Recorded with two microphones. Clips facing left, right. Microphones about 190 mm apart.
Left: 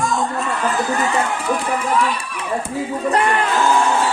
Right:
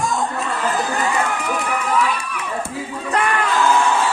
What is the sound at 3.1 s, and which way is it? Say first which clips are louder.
Speech: left 3 dB; 35° left (ahead or behind).